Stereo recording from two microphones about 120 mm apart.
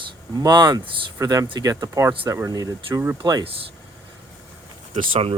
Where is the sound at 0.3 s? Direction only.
35° right (ahead or behind).